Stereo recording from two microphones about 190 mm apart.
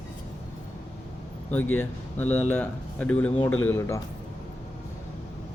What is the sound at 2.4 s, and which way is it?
Speech, 10° left (ahead or behind).